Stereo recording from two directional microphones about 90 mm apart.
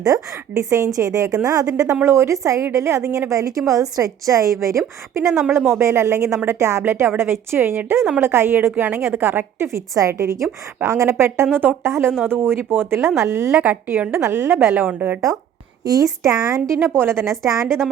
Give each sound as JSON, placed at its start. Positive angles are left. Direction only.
{"t": 0.0, "sound": "a woman's voice", "side_deg": -40}
{"t": 5.3, "sound": "a woman's voice", "side_deg": 0}
{"t": 5.5, "sound": "a woman's voice", "side_deg": -30}
{"t": 9.7, "sound": "a woman's voice", "side_deg": -35}
{"t": 15.8, "sound": "a woman's voice", "side_deg": -45}
{"t": 16.6, "sound": "a woman's voice", "side_deg": -30}
{"t": 17.5, "sound": "a woman's voice", "side_deg": 5}